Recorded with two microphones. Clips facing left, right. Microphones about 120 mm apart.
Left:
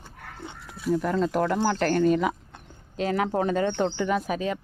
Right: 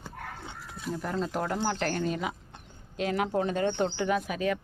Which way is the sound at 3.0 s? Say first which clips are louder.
Left 3 dB; 35° left (ahead or behind).